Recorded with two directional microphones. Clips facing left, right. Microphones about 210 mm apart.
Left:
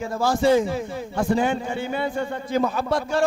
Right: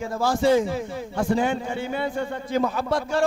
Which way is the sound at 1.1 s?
20° left (ahead or behind).